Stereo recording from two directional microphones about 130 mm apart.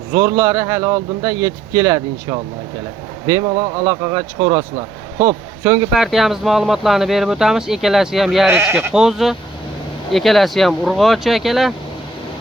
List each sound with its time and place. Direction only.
0.1 s a man's voice: 25° right (ahead or behind)
6.0 s speech: centre (ahead or behind)
8.4 s speech: 15° right (ahead or behind)
8.9 s speech: 5° right (ahead or behind)